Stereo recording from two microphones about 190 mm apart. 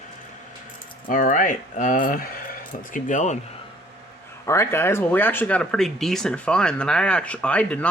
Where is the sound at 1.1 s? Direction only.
45° left (ahead or behind).